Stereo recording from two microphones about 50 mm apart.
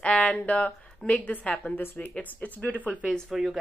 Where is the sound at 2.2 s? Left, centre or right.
Left.